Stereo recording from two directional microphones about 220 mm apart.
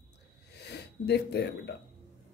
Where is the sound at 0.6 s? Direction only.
50° left (ahead or behind).